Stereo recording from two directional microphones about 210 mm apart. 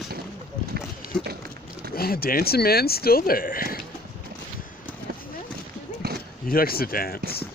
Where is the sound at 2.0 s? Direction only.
45° left (ahead or behind).